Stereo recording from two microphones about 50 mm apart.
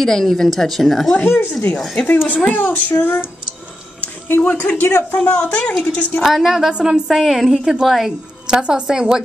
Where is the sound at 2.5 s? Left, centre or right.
Left.